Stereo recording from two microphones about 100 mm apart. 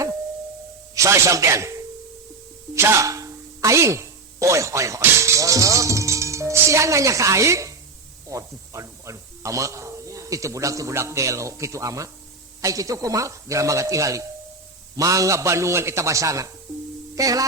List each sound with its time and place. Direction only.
0.9 s speech: 30° right (ahead or behind)
2.7 s a sound: 25° right (ahead or behind)
8.3 s speech: 30° right (ahead or behind)